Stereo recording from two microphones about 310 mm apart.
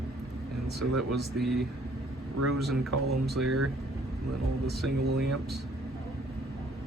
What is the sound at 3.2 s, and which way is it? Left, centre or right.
Speech, centre.